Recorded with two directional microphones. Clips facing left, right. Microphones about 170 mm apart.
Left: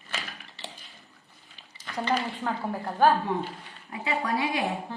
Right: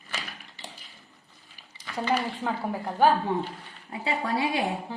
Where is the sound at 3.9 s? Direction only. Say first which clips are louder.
Even; 30° right (ahead or behind).